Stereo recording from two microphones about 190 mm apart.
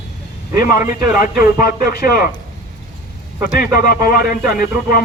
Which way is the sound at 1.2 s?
50° left (ahead or behind).